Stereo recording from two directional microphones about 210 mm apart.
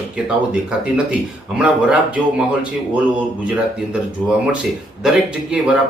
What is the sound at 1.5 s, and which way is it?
A man's voice, 5° right (ahead or behind).